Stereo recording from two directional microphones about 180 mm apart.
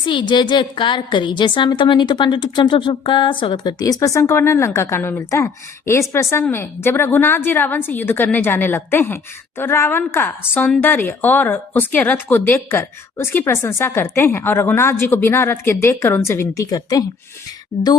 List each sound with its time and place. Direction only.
0.0 s a woman's voice: 25° left (ahead or behind)